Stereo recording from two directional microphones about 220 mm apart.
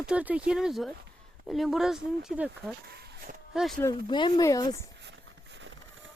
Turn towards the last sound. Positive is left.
turn(degrees=-60)  # may be behind; listen again after turning